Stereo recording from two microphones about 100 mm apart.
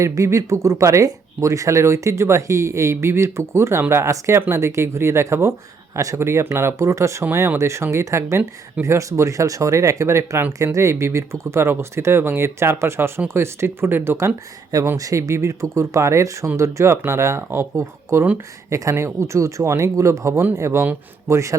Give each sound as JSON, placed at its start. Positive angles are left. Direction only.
{"t": 0.0, "sound": "speech", "side_deg": -30}